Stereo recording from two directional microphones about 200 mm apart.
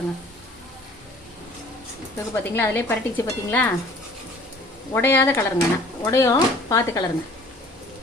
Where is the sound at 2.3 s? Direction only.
10° left (ahead or behind).